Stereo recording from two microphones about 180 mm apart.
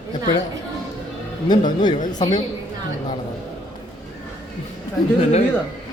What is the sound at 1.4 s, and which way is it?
Speech, 25° left (ahead or behind).